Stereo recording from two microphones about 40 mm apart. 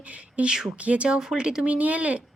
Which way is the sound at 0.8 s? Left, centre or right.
Right.